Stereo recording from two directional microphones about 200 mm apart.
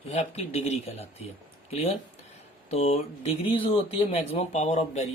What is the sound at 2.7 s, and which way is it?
Speech, 30° left (ahead or behind).